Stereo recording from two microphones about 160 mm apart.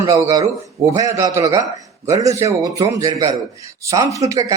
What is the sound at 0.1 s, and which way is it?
Speech, 20° right (ahead or behind).